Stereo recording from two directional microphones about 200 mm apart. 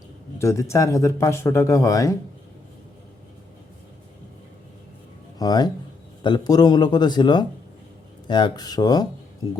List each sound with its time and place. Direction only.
0.3 s speech: 15° left (ahead or behind)
5.4 s speech: 20° left (ahead or behind)